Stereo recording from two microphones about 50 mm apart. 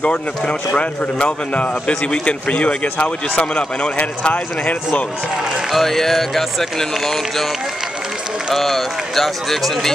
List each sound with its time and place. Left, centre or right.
0.0 s a man's voice: left
5.7 s speech: centre
8.5 s speech: centre